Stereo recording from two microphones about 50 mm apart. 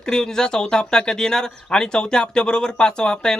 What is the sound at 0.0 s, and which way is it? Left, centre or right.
Speech, centre.